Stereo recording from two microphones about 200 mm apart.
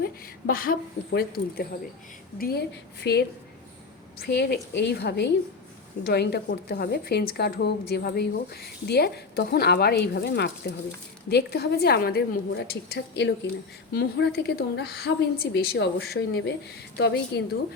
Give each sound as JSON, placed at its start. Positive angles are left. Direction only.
{"t": 0.0, "sound": "a woman's voice", "side_deg": 45}